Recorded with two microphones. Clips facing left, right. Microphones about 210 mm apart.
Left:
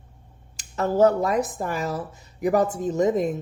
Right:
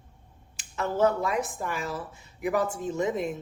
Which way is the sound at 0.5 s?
40° left (ahead or behind).